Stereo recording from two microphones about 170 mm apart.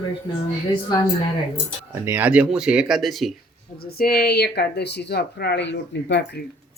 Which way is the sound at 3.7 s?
65° left (ahead or behind).